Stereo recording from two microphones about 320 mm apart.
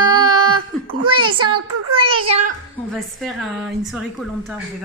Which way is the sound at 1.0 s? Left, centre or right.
Right.